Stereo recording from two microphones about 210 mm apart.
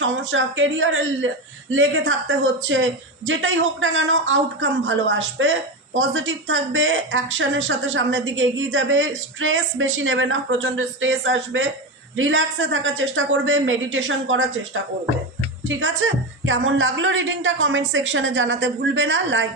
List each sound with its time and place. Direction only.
0.0 s speech: 60° right (ahead or behind)